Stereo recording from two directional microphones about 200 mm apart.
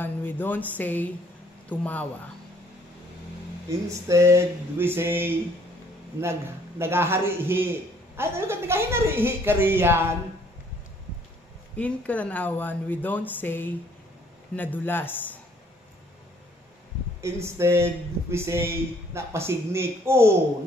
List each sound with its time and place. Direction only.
0.0 s speech: 10° left (ahead or behind)
4.1 s speech: 15° right (ahead or behind)
6.8 s speech: 10° right (ahead or behind)
11.7 s speech: 5° left (ahead or behind)
17.2 s speech: 15° right (ahead or behind)